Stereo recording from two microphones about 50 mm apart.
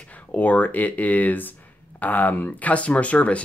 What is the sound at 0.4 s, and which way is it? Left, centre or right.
Speech, left.